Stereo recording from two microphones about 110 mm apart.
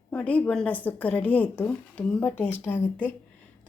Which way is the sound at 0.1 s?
10° left (ahead or behind).